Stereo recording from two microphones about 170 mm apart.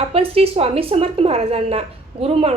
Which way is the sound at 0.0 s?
35° right (ahead or behind).